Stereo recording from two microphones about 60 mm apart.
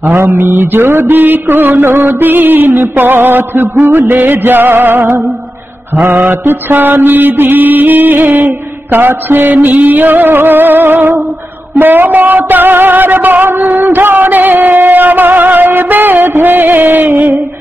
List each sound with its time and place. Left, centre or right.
0.1 s music: right